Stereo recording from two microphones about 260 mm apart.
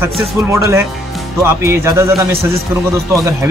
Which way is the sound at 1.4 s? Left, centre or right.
Centre.